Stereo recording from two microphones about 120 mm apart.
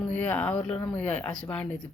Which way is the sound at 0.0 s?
10° left (ahead or behind).